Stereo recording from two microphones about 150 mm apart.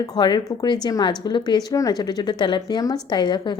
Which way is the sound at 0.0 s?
30° left (ahead or behind).